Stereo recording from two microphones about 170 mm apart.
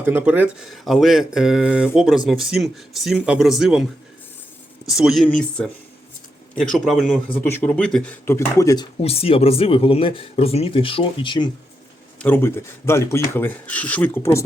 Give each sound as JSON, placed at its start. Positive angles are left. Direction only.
{"t": 0.0, "sound": "speech", "side_deg": -10}
{"t": 4.9, "sound": "speech", "side_deg": 0}
{"t": 7.3, "sound": "speech", "side_deg": 10}
{"t": 9.0, "sound": "speech", "side_deg": 35}
{"t": 12.2, "sound": "speech", "side_deg": 10}